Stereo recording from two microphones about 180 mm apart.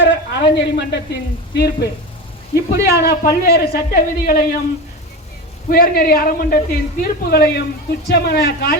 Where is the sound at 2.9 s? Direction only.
65° left (ahead or behind).